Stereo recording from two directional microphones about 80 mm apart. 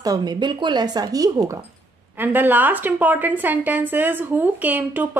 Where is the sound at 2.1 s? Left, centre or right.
Right.